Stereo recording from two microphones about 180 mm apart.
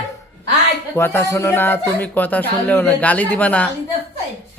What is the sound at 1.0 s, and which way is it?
Speech, 15° left (ahead or behind).